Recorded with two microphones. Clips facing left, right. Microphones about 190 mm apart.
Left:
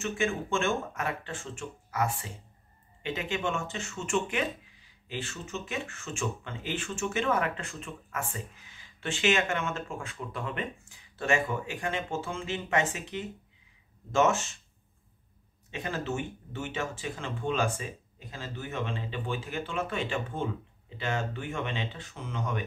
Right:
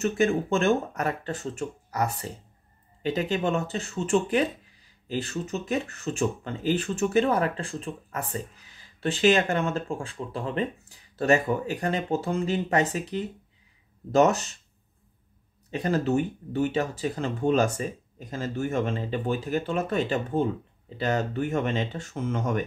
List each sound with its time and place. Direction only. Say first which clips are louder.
0.0 s speech: right 7 dB; 40° right (ahead or behind)
15.7 s speech: right 9 dB; 40° right (ahead or behind)